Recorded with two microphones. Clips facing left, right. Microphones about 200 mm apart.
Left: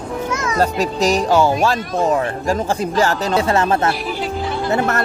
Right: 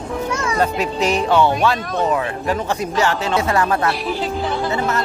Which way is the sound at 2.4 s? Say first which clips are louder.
Left 2 dB; 30° left (ahead or behind).